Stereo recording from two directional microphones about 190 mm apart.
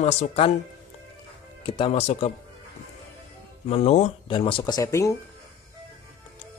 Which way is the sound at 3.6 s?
35° left (ahead or behind).